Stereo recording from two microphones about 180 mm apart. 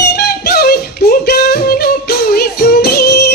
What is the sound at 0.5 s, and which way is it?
Music, 60° left (ahead or behind).